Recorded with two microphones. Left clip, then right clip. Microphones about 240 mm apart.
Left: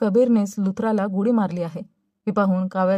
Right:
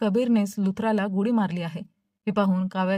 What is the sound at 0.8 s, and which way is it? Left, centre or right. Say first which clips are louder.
Speech: left 4 dB; right.